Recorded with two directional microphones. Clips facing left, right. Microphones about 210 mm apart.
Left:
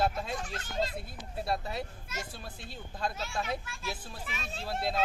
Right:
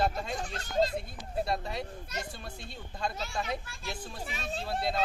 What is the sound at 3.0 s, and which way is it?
Speech, centre (ahead or behind).